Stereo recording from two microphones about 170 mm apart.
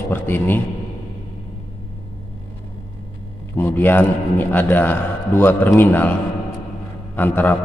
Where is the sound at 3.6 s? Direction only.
10° left (ahead or behind).